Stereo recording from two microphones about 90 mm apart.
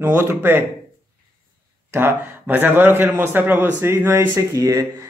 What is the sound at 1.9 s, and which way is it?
Speech, 25° right (ahead or behind).